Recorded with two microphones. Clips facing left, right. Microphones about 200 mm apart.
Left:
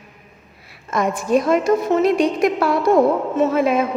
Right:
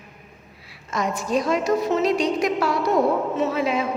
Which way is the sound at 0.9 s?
55° left (ahead or behind).